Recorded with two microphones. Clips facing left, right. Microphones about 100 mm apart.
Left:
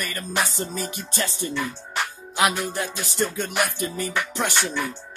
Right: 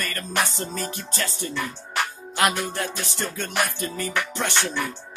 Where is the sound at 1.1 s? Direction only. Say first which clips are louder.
Left 4 dB; 20° left (ahead or behind).